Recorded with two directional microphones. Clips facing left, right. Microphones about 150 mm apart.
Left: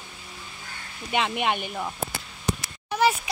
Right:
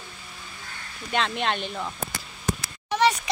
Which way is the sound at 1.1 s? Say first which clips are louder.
Left 1 dB; 15° left (ahead or behind).